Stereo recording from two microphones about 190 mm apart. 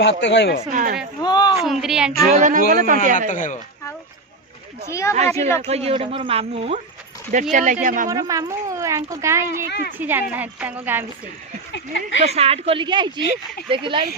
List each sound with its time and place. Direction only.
0.0 s speech: 65° left (ahead or behind)
0.7 s speech: 45° right (ahead or behind)
1.2 s speech: 20° left (ahead or behind)
1.5 s speech: 5° right (ahead or behind)
2.3 s speech: 45° right (ahead or behind)
3.2 s speech: 40° left (ahead or behind)
4.9 s speech: 15° left (ahead or behind)
5.6 s speech: 30° right (ahead or behind)
8.1 s a woman's voice: 20° right (ahead or behind)
9.6 s a woman's voice: 60° left (ahead or behind)
10.0 s a woman's voice: 10° right (ahead or behind)
11.7 s speech: 70° left (ahead or behind)
12.2 s a woman's voice: 35° right (ahead or behind)